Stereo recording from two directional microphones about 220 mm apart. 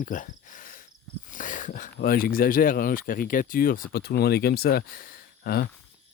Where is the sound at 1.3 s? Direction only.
35° left (ahead or behind).